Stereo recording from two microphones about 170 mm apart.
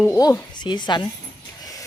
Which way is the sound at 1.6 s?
20° left (ahead or behind).